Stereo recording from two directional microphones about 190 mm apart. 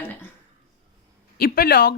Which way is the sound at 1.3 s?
50° left (ahead or behind).